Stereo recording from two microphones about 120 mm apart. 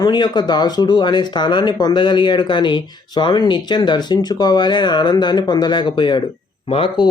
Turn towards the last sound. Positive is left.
turn(degrees=45)  # may be behind; listen again after turning